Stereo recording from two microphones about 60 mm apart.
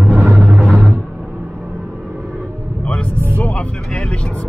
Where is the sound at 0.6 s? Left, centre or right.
Centre.